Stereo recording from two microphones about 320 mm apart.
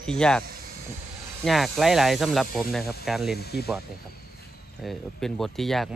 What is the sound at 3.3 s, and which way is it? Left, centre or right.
Speech, left.